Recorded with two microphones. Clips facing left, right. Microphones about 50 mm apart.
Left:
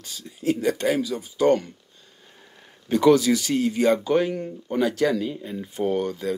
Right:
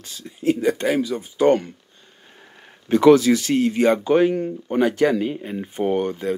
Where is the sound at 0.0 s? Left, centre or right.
Right.